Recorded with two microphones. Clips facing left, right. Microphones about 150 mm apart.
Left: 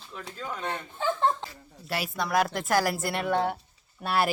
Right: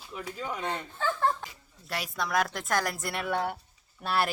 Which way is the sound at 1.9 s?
Centre (ahead or behind).